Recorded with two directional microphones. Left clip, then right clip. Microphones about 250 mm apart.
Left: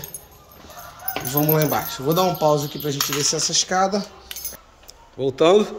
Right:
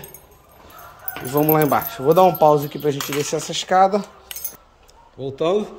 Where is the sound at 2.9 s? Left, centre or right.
Right.